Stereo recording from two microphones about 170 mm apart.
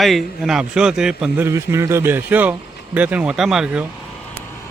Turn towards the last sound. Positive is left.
turn(degrees=-5)  # may be behind; listen again after turning